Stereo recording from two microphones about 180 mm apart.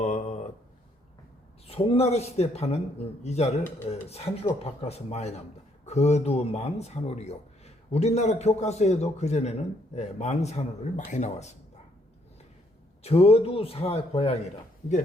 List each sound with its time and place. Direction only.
0.0 s a sound: 40° left (ahead or behind)
1.6 s a man's voice: 35° left (ahead or behind)
13.0 s a man's voice: 35° left (ahead or behind)